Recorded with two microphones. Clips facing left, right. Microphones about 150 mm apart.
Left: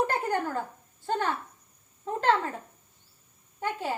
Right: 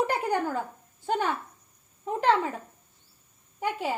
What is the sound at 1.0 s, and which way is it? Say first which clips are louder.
Speech: right 1 dB; 15° right (ahead or behind).